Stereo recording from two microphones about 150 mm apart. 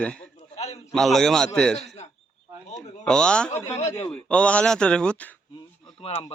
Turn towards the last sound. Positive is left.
turn(degrees=40)  # may be behind; listen again after turning